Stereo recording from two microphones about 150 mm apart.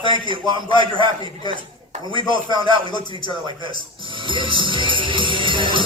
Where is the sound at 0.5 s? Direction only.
30° left (ahead or behind).